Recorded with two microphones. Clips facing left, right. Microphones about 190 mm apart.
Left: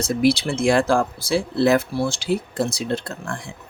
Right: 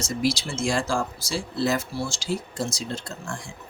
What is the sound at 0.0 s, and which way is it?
Speech, 60° left (ahead or behind).